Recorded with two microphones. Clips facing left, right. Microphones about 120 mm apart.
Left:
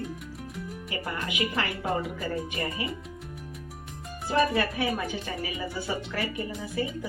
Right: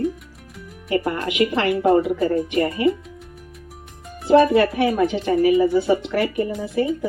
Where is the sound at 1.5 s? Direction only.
30° right (ahead or behind).